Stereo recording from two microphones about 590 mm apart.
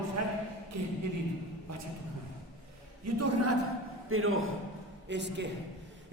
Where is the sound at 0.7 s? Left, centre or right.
Right.